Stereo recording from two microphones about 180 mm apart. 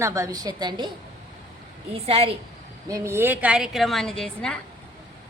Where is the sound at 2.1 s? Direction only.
30° right (ahead or behind).